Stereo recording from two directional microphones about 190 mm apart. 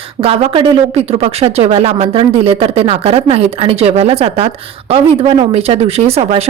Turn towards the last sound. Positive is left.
turn(degrees=-30)  # may be behind; listen again after turning